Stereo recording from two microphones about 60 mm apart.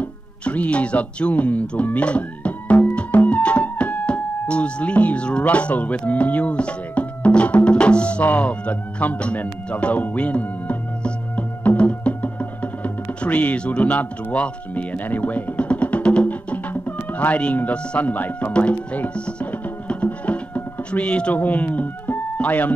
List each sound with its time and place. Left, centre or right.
0.0 s insect: left
17.2 s speech: left